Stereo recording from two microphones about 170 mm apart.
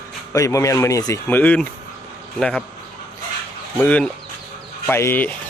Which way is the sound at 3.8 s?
10° left (ahead or behind).